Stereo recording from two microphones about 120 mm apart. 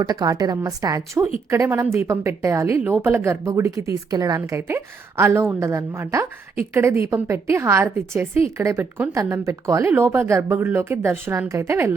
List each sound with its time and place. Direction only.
0.0 s a woman's voice: 35° right (ahead or behind)